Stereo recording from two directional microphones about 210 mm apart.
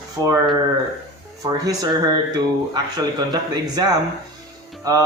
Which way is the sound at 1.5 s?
15° right (ahead or behind).